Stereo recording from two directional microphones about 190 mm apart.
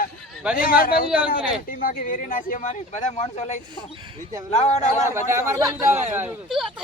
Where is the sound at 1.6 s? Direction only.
50° left (ahead or behind).